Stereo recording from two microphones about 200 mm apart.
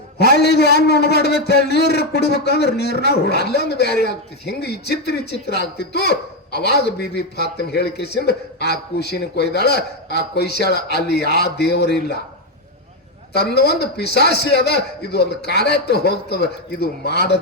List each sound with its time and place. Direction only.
0.2 s a man's voice: 55° left (ahead or behind)
13.3 s a man's voice: 55° left (ahead or behind)